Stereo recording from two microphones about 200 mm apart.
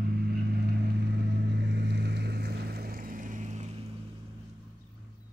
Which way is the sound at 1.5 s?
60° right (ahead or behind).